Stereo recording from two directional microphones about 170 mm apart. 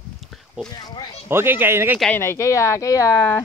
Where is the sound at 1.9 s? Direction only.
5° left (ahead or behind).